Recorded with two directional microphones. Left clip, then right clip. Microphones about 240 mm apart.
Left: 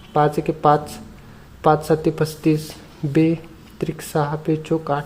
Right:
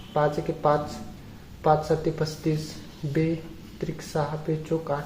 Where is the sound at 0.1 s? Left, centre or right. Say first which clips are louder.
Left 6 dB; left.